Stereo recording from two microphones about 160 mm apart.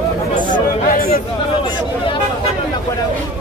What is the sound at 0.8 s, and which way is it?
Chatter, 65° left (ahead or behind).